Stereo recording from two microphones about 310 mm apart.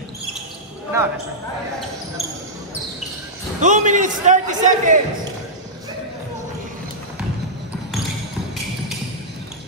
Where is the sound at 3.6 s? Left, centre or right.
Right.